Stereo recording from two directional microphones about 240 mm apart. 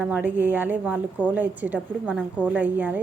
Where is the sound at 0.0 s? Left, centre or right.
Centre.